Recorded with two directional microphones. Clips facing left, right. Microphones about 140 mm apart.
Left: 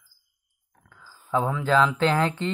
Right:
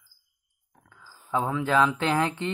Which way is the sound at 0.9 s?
25° right (ahead or behind).